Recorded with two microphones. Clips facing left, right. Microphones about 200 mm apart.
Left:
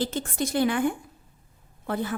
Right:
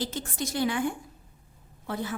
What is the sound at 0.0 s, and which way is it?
A woman's voice, 55° left (ahead or behind).